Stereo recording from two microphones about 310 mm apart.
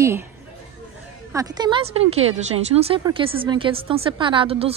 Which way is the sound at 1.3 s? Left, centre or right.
Centre.